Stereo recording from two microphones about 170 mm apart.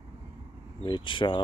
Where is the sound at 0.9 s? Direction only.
30° left (ahead or behind).